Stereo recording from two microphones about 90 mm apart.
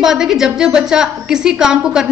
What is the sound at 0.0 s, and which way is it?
A woman's voice, 5° right (ahead or behind).